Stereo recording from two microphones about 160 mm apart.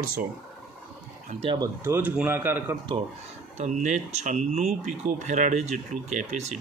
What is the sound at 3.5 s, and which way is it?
Speech, 50° right (ahead or behind).